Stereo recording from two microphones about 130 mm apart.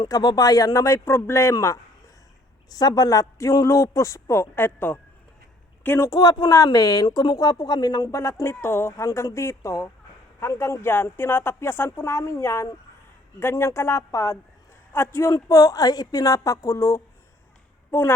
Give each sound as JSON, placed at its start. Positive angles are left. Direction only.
{"t": 0.0, "sound": "speech", "side_deg": 30}